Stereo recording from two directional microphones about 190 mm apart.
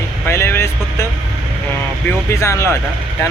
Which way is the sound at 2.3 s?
15° left (ahead or behind).